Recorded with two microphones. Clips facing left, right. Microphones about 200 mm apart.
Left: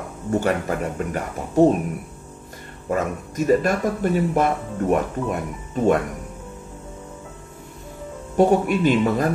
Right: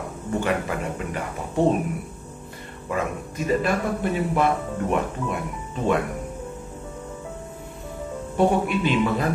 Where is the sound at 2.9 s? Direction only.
45° left (ahead or behind).